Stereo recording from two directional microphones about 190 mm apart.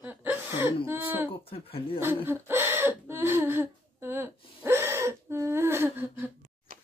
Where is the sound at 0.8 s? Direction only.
10° right (ahead or behind).